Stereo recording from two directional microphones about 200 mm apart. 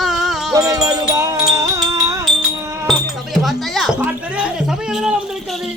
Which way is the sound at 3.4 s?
Centre (ahead or behind).